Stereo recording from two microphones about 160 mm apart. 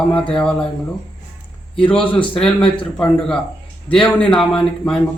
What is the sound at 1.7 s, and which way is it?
Speech, 5° left (ahead or behind).